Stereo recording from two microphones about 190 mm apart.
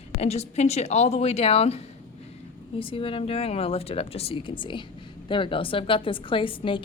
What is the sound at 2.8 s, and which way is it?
A woman's voice, 30° left (ahead or behind).